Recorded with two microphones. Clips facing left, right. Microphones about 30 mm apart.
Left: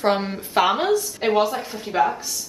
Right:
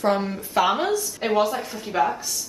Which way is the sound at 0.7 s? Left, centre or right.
Centre.